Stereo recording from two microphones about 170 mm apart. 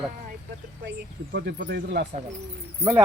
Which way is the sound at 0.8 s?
90° right.